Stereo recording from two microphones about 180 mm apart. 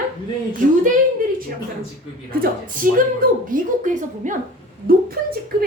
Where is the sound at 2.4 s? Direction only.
50° right (ahead or behind).